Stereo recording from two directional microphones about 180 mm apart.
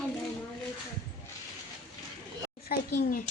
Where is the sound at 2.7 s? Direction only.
55° left (ahead or behind).